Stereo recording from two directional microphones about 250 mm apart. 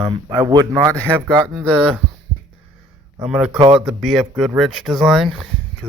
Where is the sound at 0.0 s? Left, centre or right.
Centre.